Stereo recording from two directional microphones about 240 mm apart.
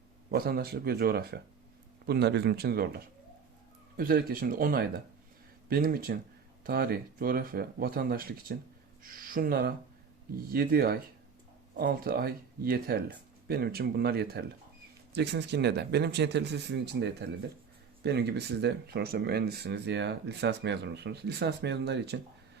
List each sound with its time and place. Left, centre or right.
0.3 s speech: right